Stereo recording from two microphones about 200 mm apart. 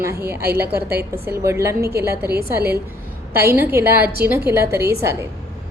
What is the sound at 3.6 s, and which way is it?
A woman's voice, 10° right (ahead or behind).